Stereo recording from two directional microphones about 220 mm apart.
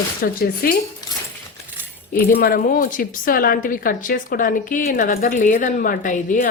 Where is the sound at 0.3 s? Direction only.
40° left (ahead or behind).